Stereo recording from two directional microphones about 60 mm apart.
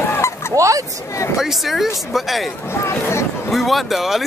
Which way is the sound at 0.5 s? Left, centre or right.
Right.